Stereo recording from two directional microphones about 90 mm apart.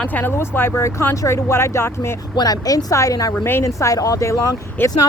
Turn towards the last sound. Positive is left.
turn(degrees=35)  # may be behind; listen again after turning